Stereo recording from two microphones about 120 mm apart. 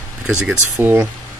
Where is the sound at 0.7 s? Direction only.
20° right (ahead or behind).